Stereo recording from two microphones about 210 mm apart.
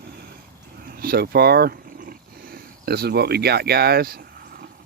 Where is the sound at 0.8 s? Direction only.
45° right (ahead or behind).